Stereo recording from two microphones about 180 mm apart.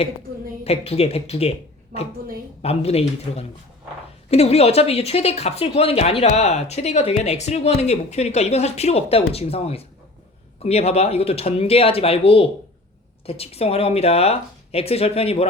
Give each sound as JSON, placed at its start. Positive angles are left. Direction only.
{"t": 0.6, "sound": "a woman's voice", "side_deg": 35}